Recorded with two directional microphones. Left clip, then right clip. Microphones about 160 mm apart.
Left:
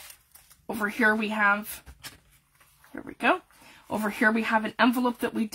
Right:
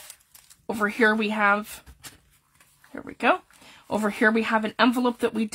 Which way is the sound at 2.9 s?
40° right (ahead or behind).